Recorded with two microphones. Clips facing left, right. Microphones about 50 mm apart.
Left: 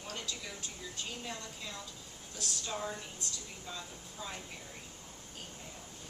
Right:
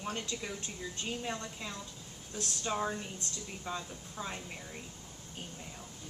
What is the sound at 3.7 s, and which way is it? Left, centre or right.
Speech, right.